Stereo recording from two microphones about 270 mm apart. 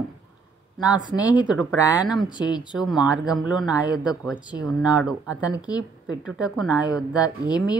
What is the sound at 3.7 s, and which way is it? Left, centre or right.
Speech, centre.